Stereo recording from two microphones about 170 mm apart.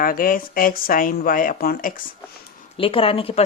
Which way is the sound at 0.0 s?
55° left (ahead or behind).